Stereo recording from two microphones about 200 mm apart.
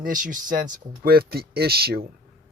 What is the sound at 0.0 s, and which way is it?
Speech, 45° right (ahead or behind).